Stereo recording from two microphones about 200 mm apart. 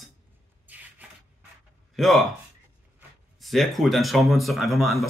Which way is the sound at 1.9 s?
Centre (ahead or behind).